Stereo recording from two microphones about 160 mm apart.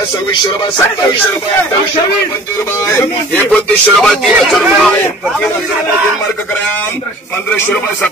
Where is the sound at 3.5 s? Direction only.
Centre (ahead or behind).